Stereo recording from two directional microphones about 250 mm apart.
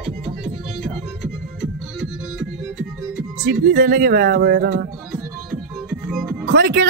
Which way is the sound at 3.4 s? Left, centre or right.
Right.